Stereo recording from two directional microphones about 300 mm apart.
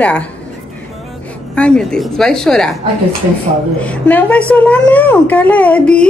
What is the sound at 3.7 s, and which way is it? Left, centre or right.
A woman's voice, centre.